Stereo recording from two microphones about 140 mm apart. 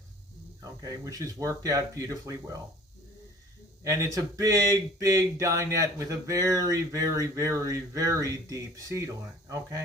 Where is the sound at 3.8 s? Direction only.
25° right (ahead or behind).